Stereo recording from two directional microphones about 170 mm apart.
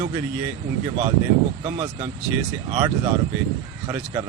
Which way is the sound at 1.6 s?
25° right (ahead or behind).